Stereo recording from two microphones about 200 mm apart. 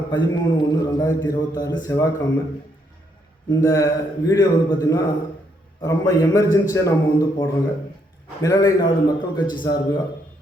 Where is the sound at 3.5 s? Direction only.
15° left (ahead or behind).